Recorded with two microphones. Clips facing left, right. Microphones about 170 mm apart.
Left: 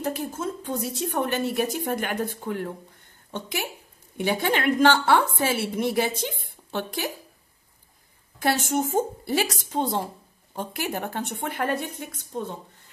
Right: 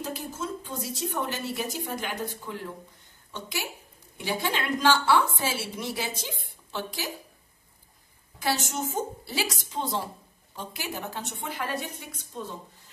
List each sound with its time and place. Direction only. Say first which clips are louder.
0.0 s a woman's voice: left 5 dB; 60° left (ahead or behind)
8.4 s a woman's voice: left 5 dB; 55° left (ahead or behind)